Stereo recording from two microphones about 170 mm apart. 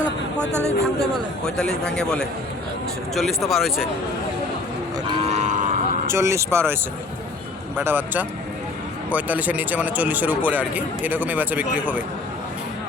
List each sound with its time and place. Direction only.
0.5 s speech: 15° right (ahead or behind)
1.5 s a man's voice: 5° left (ahead or behind)
5.3 s cattle: 45° right (ahead or behind)
6.1 s speech: 15° right (ahead or behind)
7.8 s speech: 10° right (ahead or behind)